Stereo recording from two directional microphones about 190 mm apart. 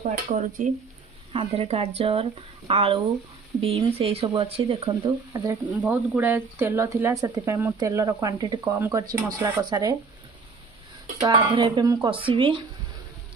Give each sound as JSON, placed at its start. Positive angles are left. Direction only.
{"t": 0.3, "sound": "speech", "side_deg": -40}
{"t": 1.3, "sound": "a woman's voice", "side_deg": -30}
{"t": 11.1, "sound": "speech", "side_deg": -25}